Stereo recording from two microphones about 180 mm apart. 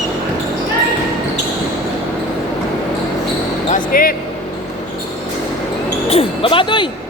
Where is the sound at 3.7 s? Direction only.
50° left (ahead or behind).